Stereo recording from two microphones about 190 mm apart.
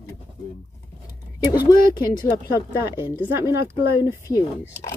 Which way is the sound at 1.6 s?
20° left (ahead or behind).